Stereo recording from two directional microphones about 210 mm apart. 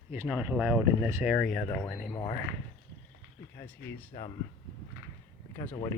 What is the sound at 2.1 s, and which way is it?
Speech, 15° left (ahead or behind).